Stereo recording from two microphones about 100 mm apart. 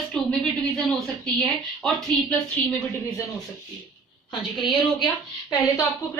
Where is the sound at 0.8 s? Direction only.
5° left (ahead or behind).